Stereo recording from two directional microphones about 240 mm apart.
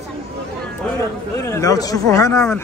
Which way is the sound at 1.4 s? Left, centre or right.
Centre.